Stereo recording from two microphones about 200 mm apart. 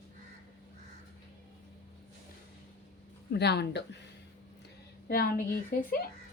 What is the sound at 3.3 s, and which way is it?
Speech, 55° left (ahead or behind).